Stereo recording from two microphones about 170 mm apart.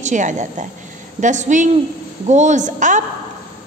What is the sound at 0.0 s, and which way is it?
A woman's voice, 45° right (ahead or behind).